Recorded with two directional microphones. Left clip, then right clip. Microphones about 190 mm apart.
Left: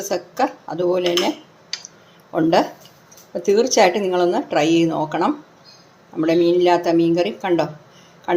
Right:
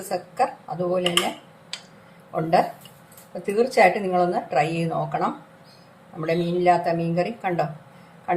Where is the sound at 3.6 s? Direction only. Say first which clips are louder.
Left 3 dB; 45° left (ahead or behind).